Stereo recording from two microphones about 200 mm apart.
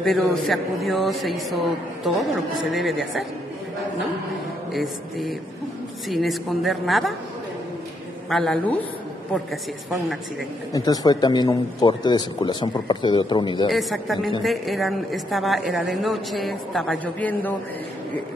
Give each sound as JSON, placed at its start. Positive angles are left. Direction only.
{"t": 0.0, "sound": "a woman's voice", "side_deg": 5}
{"t": 4.7, "sound": "a woman's voice", "side_deg": 0}
{"t": 8.3, "sound": "a woman's voice", "side_deg": 0}
{"t": 10.7, "sound": "a man's voice", "side_deg": 20}
{"t": 13.7, "sound": "a woman's voice", "side_deg": 0}